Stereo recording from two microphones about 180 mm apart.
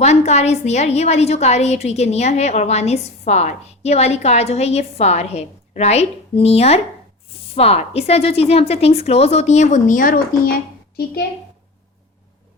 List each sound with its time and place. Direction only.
0.0 s a woman's voice: 40° left (ahead or behind); by 11.2 s 60° left (ahead or behind)